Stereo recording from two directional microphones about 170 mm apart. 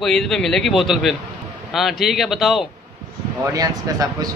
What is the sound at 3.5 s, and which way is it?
Speech, 20° right (ahead or behind).